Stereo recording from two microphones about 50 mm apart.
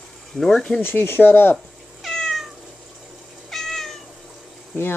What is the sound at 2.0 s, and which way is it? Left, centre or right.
Cat, centre.